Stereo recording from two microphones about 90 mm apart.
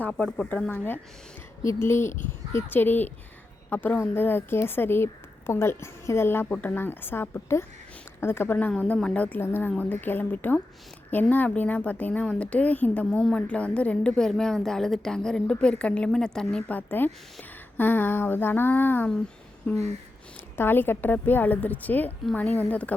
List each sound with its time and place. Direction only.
0.1 s a woman's voice: 10° left (ahead or behind)
1.6 s a woman's voice: 30° left (ahead or behind)
9.0 s a woman's voice: 10° left (ahead or behind)
20.6 s a woman's voice: 25° left (ahead or behind)